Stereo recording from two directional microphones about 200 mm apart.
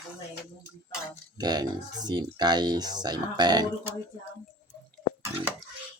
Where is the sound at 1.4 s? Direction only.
20° right (ahead or behind).